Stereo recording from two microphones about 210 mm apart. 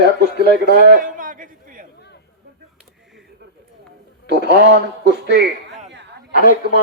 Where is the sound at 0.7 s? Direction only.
45° right (ahead or behind).